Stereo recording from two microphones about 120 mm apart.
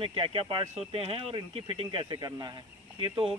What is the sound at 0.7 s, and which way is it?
Speech, 60° right (ahead or behind).